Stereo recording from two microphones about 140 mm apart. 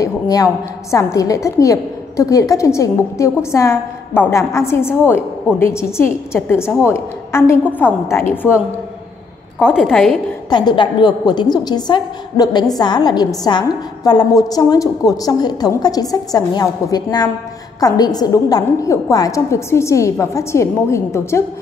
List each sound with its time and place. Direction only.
0.0 s a woman's voice: 25° left (ahead or behind)
9.7 s a woman's voice: centre (ahead or behind)
10.5 s a woman's voice: 30° left (ahead or behind)